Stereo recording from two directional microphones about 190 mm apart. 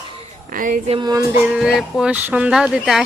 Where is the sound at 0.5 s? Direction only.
45° right (ahead or behind).